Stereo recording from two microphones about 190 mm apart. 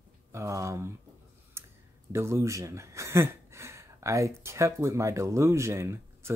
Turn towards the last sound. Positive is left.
turn(degrees=-15)  # may be behind; listen again after turning